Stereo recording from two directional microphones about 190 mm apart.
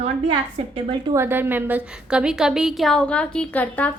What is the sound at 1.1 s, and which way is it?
A woman's voice, 10° right (ahead or behind).